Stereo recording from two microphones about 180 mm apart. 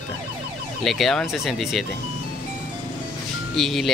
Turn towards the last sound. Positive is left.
turn(degrees=0)  # may be behind; listen again after turning